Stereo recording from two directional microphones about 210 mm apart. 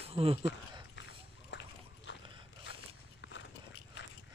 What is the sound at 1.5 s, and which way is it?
Dog, 60° left (ahead or behind).